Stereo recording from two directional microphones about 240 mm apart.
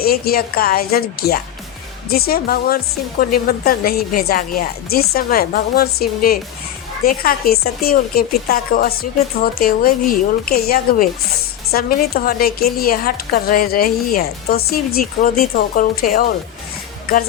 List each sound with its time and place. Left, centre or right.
0.0 s a woman's voice: left
2.0 s a woman's voice: left